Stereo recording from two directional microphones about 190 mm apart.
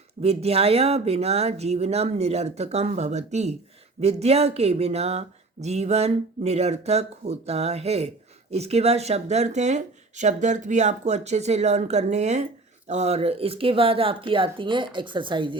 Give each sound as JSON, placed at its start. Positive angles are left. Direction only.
{"t": 0.2, "sound": "speech", "side_deg": -35}